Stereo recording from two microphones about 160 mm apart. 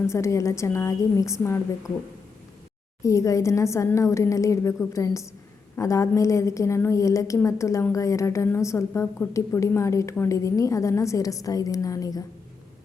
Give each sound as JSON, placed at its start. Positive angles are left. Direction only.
{"t": 0.1, "sound": "a woman's voice", "side_deg": 20}
{"t": 3.0, "sound": "a woman's voice", "side_deg": 20}